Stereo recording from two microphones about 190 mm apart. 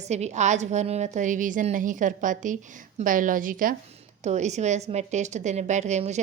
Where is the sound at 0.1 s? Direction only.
35° right (ahead or behind).